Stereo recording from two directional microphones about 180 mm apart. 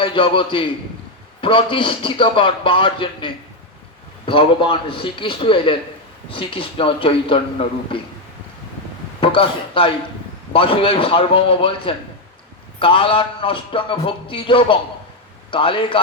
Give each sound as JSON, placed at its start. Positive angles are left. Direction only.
{"t": 0.0, "sound": "music", "side_deg": 30}
{"t": 9.2, "sound": "speech", "side_deg": 30}
{"t": 10.5, "sound": "music", "side_deg": 30}